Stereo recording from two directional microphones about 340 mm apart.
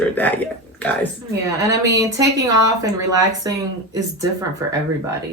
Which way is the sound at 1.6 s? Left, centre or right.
Centre.